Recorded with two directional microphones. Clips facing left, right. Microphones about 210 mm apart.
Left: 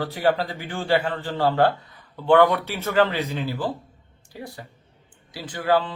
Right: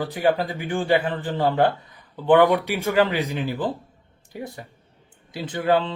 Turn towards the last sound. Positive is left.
turn(degrees=-25)  # may be behind; listen again after turning